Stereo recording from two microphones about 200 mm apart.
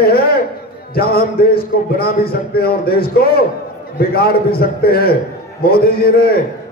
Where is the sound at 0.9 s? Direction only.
50° left (ahead or behind).